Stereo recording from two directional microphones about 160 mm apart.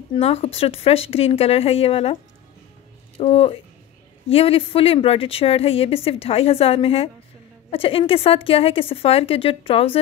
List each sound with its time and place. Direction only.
0.2 s a woman's voice: 40° left (ahead or behind)
3.2 s a woman's voice: 40° left (ahead or behind)